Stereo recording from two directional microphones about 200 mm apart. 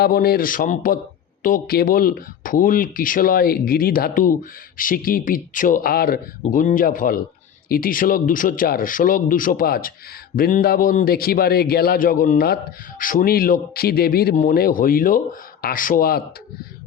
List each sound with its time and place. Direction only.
0.0 s speech: 50° left (ahead or behind)